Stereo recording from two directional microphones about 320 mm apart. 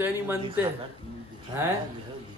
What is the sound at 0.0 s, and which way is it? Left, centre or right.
Speech, centre.